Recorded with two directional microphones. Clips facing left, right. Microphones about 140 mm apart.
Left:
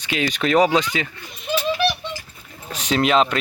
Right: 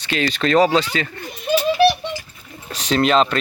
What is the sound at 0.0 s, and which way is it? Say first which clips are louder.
Speech: right 2 dB; 10° left (ahead or behind).